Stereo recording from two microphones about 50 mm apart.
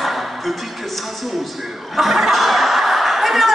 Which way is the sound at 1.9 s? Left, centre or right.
Centre.